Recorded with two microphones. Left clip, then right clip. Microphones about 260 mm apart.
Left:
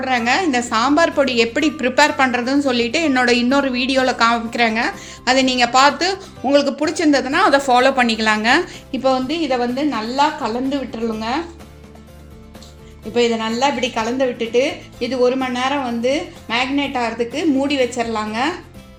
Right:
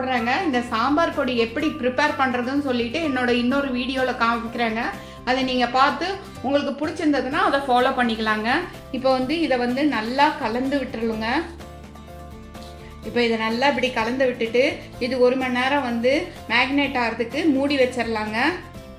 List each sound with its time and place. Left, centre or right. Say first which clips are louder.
0.0 s a woman's voice: left 5 dB; left
9.0 s speech: left 2 dB; left
13.1 s speech: left 4 dB; left